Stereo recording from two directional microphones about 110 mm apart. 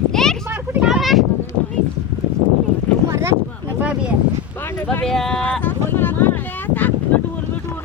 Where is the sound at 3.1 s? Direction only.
25° right (ahead or behind).